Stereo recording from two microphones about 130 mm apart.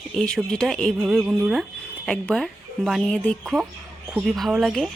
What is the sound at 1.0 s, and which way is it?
Speech, 5° right (ahead or behind).